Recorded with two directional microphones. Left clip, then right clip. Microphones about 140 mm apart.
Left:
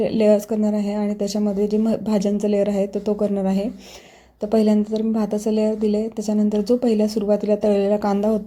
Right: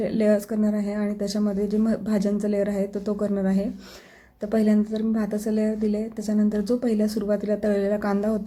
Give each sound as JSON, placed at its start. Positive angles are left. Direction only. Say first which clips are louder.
{"t": 0.0, "sound": "a woman's voice", "louder": "left 5 dB", "side_deg": 15}